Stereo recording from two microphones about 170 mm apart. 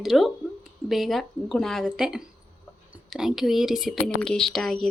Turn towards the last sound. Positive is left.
turn(degrees=0)  # may be behind; listen again after turning